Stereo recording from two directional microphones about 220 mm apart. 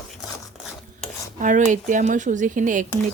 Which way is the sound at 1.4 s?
35° right (ahead or behind).